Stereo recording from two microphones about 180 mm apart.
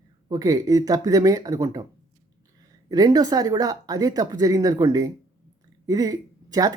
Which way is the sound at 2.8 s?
20° right (ahead or behind).